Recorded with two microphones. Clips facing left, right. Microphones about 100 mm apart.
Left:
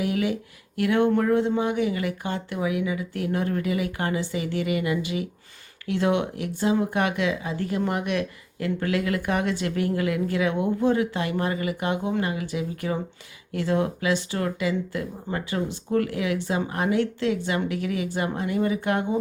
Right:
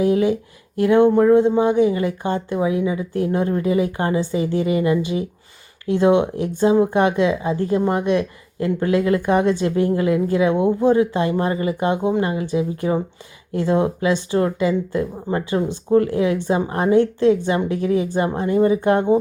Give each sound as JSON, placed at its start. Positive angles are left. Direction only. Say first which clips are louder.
{"t": 0.0, "sound": "speech", "louder": "right 8 dB", "side_deg": -30}